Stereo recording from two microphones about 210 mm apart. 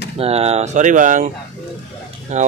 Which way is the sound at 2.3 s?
35° right (ahead or behind).